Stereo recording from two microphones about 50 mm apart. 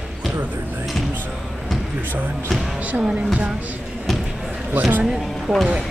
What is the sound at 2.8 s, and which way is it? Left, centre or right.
Music, right.